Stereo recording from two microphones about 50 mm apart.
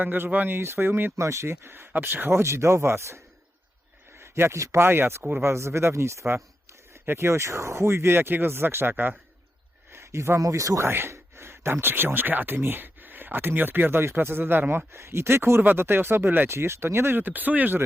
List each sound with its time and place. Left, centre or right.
0.0 s speech: right
0.6 s speech: right
1.1 s speech: right
1.9 s speech: right
2.4 s speech: right
4.2 s speech: right
4.9 s speech: right
7.1 s speech: right
9.9 s speech: right
10.8 s speech: right
14.9 s speech: right
15.6 s speech: right
16.5 s speech: right
17.2 s speech: right